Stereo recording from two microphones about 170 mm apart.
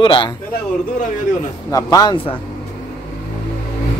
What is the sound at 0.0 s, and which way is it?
Speech, 30° left (ahead or behind).